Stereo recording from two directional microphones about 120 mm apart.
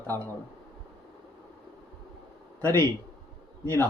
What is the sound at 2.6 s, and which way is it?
Speech, 20° left (ahead or behind).